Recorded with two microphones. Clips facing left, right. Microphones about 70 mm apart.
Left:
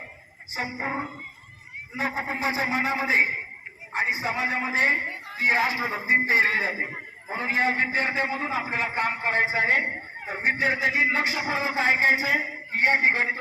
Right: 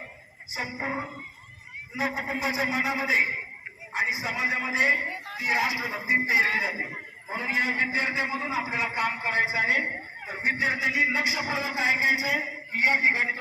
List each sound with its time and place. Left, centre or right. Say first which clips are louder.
0.5 s a man's voice: left 2 dB; left